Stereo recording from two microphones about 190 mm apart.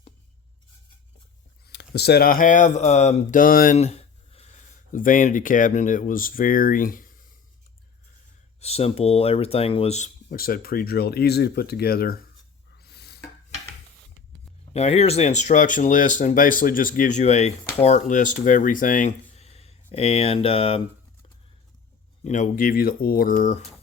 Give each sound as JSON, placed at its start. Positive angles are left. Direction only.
{"t": 1.6, "sound": "speech", "side_deg": 65}
{"t": 3.8, "sound": "speech", "side_deg": 35}
{"t": 8.6, "sound": "speech", "side_deg": 30}
{"t": 10.2, "sound": "speech", "side_deg": 50}
{"t": 12.8, "sound": "a sound", "side_deg": 55}
{"t": 14.7, "sound": "speech", "side_deg": 35}
{"t": 22.2, "sound": "speech", "side_deg": 40}